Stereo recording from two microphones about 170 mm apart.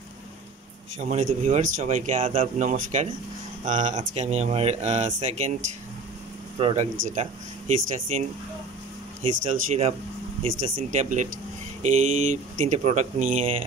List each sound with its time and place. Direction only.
0.9 s speech: 45° right (ahead or behind)
6.6 s speech: 40° right (ahead or behind)